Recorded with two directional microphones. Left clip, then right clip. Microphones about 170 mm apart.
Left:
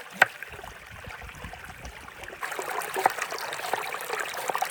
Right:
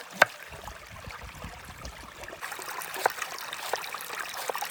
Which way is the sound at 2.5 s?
20° left (ahead or behind).